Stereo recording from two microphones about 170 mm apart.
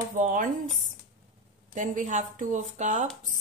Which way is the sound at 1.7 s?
50° right (ahead or behind).